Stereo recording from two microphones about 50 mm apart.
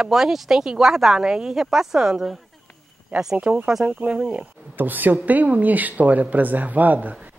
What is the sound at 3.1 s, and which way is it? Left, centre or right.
Speech, right.